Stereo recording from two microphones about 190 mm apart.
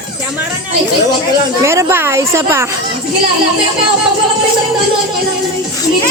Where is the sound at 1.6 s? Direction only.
15° right (ahead or behind).